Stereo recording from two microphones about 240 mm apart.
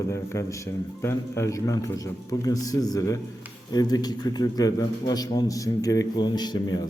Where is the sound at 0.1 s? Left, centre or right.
Centre.